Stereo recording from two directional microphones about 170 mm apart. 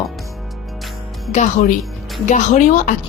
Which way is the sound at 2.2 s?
45° left (ahead or behind).